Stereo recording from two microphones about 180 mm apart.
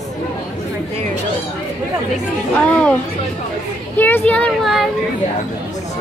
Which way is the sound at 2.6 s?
5° left (ahead or behind).